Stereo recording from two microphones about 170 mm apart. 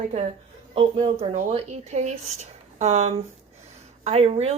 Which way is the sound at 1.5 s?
40° right (ahead or behind).